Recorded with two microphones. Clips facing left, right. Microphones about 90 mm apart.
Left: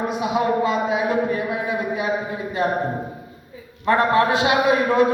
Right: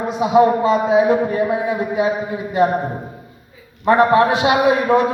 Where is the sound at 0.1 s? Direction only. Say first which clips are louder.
Right 11 dB; 30° right (ahead or behind).